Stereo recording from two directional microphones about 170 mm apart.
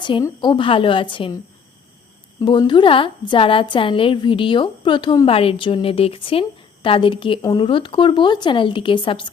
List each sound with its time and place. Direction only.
0.0 s speech: 25° left (ahead or behind)
2.4 s a woman's voice: 30° left (ahead or behind)